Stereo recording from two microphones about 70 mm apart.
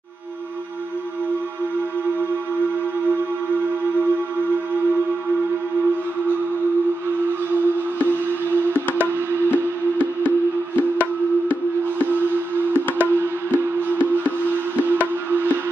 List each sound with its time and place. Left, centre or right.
10.8 s music: left
12.7 s music: right
15.0 s music: right